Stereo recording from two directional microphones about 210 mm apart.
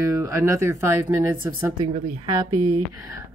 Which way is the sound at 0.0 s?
15° right (ahead or behind).